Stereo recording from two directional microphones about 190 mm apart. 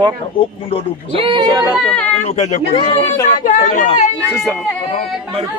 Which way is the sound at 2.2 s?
35° left (ahead or behind).